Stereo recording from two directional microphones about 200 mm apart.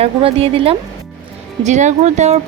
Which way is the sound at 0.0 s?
30° right (ahead or behind).